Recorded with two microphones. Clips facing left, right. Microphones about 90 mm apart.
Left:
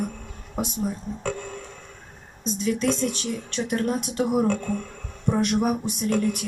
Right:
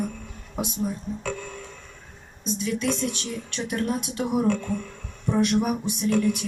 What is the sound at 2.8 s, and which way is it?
A woman's voice, 35° left (ahead or behind).